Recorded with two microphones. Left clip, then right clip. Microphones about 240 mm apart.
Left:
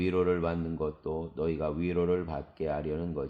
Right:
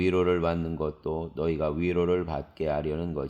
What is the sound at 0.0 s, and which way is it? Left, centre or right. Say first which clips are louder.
Speech: right 4 dB; right.